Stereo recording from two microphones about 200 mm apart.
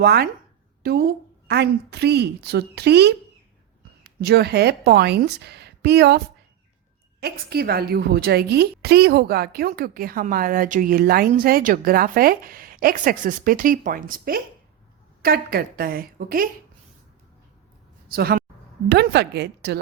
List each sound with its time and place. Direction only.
0.0 s a woman's voice: 50° right (ahead or behind)
18.1 s a woman's voice: 50° right (ahead or behind)